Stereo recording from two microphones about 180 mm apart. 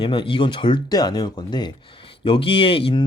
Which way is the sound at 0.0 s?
30° left (ahead or behind).